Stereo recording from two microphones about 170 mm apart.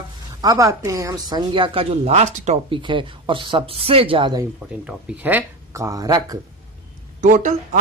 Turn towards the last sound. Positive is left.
turn(degrees=-50)  # may be behind; listen again after turning